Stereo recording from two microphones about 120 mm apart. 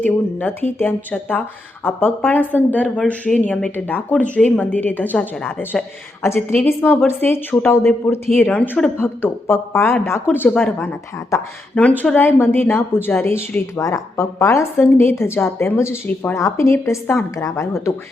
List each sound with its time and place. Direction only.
0.0 s a woman's voice: 15° left (ahead or behind)